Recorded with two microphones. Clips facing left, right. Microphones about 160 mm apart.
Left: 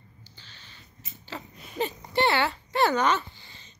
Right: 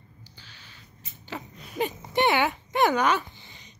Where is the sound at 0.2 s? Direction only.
10° right (ahead or behind).